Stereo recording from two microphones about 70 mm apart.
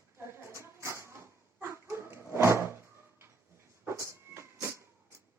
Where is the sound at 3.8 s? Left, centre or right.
Right.